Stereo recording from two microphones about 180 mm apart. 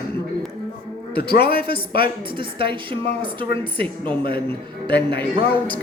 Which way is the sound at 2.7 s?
30° right (ahead or behind).